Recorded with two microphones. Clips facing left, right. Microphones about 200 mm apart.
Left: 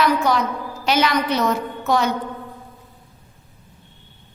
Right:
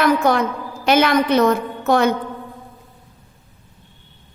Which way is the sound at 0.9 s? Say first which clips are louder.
Right 4 dB; 55° right (ahead or behind).